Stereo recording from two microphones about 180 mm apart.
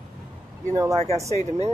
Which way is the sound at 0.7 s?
20° right (ahead or behind).